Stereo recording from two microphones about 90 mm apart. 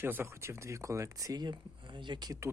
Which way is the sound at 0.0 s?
25° right (ahead or behind).